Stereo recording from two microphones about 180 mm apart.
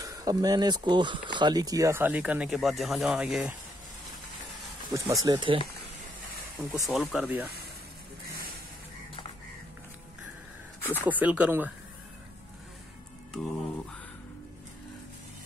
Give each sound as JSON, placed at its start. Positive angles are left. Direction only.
{"t": 0.0, "sound": "speech", "side_deg": -20}
{"t": 4.9, "sound": "speech", "side_deg": -20}
{"t": 6.6, "sound": "speech", "side_deg": 0}
{"t": 10.8, "sound": "a sound", "side_deg": 10}
{"t": 11.1, "sound": "speech", "side_deg": -10}